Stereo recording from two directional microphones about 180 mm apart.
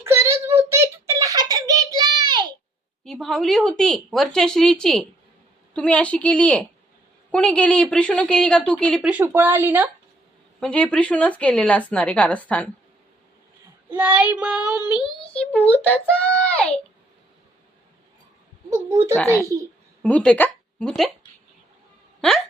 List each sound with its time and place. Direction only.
0.0 s a sound: 15° right (ahead or behind)
3.0 s a woman's voice: centre (ahead or behind)
9.0 s speech: 10° right (ahead or behind)
10.6 s a woman's voice: 5° left (ahead or behind)
13.9 s speech: 10° right (ahead or behind)
15.5 s a woman's voice: 10° left (ahead or behind)
20.0 s speech: 5° left (ahead or behind)